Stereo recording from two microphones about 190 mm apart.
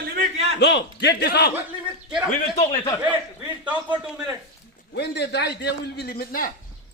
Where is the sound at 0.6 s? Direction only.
65° left (ahead or behind).